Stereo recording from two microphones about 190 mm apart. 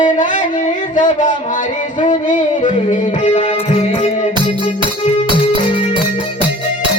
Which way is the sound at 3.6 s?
30° left (ahead or behind).